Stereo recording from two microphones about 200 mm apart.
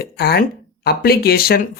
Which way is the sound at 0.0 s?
50° left (ahead or behind).